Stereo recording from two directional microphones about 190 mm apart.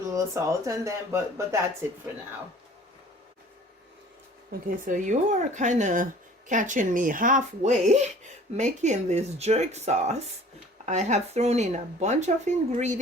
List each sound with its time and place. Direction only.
0.1 s speech: 15° right (ahead or behind)
4.9 s speech: 40° right (ahead or behind)